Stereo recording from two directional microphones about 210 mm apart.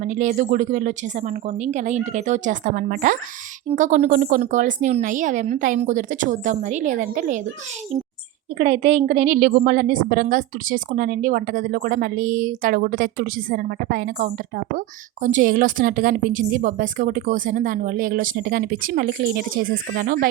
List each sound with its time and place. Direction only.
0.0 s a woman's voice: 35° right (ahead or behind)
8.5 s a woman's voice: 35° right (ahead or behind)